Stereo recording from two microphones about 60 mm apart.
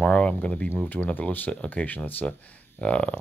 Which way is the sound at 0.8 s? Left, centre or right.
Left.